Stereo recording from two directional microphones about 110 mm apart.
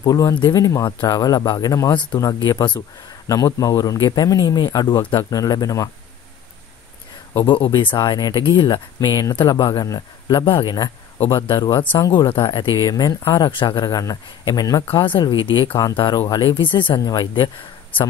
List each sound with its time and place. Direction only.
0.0 s a man's voice: 35° left (ahead or behind)
2.4 s speech: 45° left (ahead or behind)
3.3 s a man's voice: 30° left (ahead or behind)
7.4 s a man's voice: 50° left (ahead or behind); by 13.1 s 35° left (ahead or behind)
13.3 s a man's voice: 45° left (ahead or behind)
14.9 s a man's voice: 45° left (ahead or behind)